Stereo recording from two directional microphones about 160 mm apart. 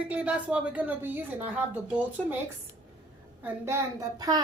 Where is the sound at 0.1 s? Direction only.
5° right (ahead or behind).